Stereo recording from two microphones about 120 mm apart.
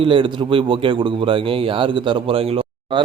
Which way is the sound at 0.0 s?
45° right (ahead or behind).